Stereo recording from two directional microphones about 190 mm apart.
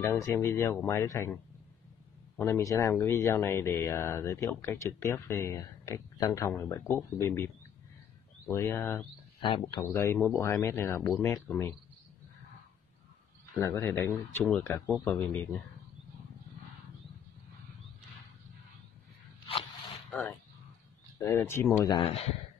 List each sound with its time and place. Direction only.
0.0 s speech: 15° left (ahead or behind)
9.4 s speech: 25° left (ahead or behind)
13.6 s speech: 15° left (ahead or behind)
20.1 s speech: 10° left (ahead or behind); by 22.3 s 30° left (ahead or behind)